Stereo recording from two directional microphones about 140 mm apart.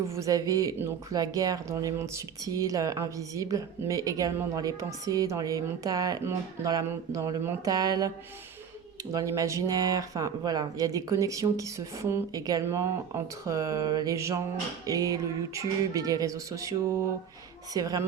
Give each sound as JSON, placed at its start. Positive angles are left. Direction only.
{"t": 0.0, "sound": "speech", "side_deg": -20}
{"t": 9.1, "sound": "speech", "side_deg": -25}